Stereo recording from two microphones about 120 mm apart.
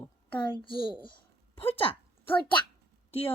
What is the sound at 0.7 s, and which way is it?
Speech, 45° left (ahead or behind).